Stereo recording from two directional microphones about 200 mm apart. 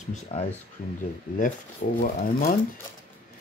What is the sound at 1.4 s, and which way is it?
Speech, 40° left (ahead or behind).